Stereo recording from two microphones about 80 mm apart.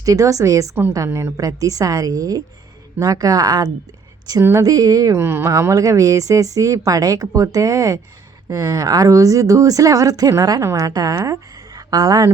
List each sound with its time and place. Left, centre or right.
0.0 s speech: right
4.4 s speech: right
5.1 s speech: right
11.1 s speech: right
11.7 s a sound: right